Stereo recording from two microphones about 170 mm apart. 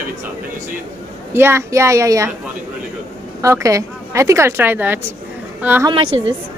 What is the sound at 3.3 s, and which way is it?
A woman's voice, 15° right (ahead or behind).